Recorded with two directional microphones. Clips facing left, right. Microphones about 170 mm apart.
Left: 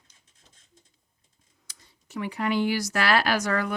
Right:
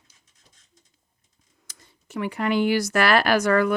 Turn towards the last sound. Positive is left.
turn(degrees=-60)  # may be behind; listen again after turning